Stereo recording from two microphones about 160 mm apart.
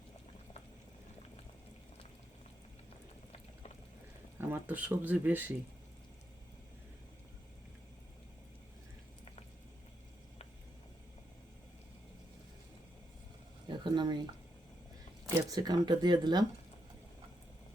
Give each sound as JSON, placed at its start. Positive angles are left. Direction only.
{"t": 4.4, "sound": "speech", "side_deg": -10}
{"t": 13.7, "sound": "a sound", "side_deg": -30}
{"t": 15.4, "sound": "speech", "side_deg": -25}